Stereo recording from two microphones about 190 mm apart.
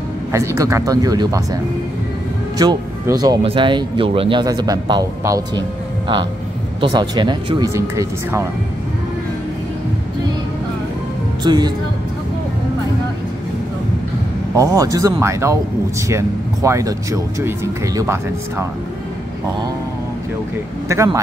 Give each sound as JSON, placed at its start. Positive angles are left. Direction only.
{"t": 0.3, "sound": "speech", "side_deg": -15}
{"t": 6.8, "sound": "speech", "side_deg": -25}
{"t": 11.4, "sound": "speech", "side_deg": -20}
{"t": 14.6, "sound": "speech", "side_deg": -20}
{"t": 20.9, "sound": "speech", "side_deg": -15}